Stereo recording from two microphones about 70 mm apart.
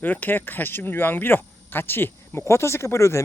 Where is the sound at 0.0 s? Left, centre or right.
Left.